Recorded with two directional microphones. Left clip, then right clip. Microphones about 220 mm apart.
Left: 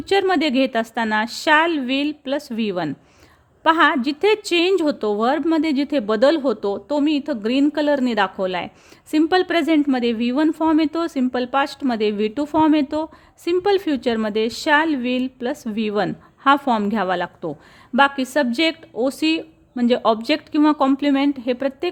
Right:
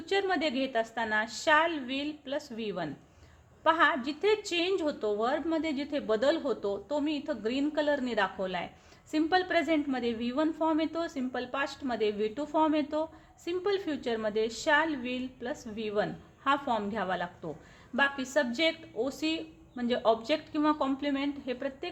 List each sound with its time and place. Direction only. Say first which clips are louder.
0.0 s a woman's voice: left 11 dB; 50° left (ahead or behind)